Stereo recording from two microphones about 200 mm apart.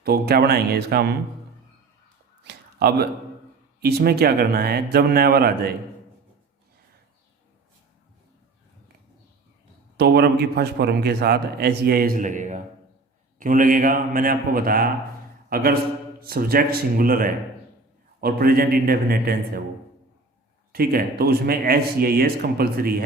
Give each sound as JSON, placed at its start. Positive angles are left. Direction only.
{"t": 0.0, "sound": "a man's voice", "side_deg": -50}
{"t": 2.4, "sound": "a sound", "side_deg": -55}
{"t": 3.8, "sound": "a man's voice", "side_deg": -55}
{"t": 10.0, "sound": "a man's voice", "side_deg": -55}
{"t": 20.7, "sound": "a man's voice", "side_deg": -50}